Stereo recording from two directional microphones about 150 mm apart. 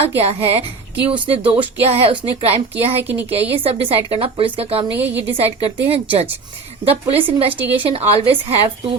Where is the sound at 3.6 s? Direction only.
40° right (ahead or behind).